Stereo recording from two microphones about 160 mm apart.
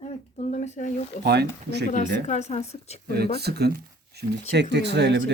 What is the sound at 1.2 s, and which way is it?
Speech, 90° right.